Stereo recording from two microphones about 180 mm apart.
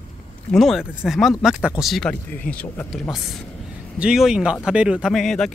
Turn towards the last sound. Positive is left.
turn(degrees=0)  # may be behind; listen again after turning